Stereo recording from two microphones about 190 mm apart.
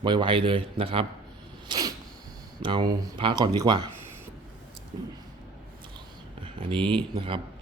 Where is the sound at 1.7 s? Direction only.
20° right (ahead or behind).